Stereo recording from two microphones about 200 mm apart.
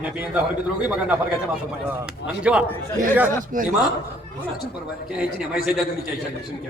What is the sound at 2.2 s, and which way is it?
Speech, 5° right (ahead or behind).